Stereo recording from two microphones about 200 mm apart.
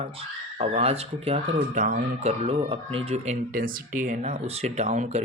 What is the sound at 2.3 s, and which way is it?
Speech, 30° right (ahead or behind).